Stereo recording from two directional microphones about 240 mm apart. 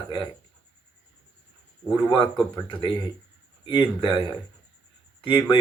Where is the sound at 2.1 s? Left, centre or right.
Left.